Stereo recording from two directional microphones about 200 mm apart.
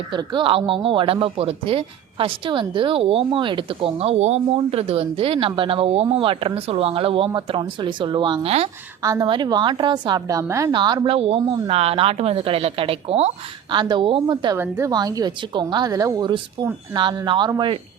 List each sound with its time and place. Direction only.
0.1 s speech: 25° right (ahead or behind)